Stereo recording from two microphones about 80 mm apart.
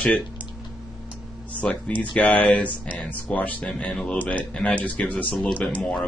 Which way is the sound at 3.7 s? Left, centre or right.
Centre.